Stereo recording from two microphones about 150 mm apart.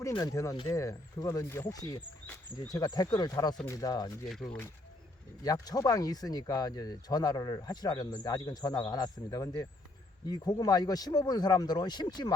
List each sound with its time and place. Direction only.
0.0 s speech: 20° left (ahead or behind)
5.4 s speech: 25° left (ahead or behind)